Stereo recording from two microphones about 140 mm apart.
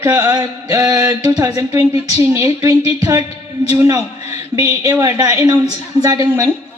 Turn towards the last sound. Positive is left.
turn(degrees=-25)  # may be behind; listen again after turning